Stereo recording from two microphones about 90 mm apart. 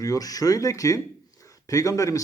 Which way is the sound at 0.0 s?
40° left (ahead or behind).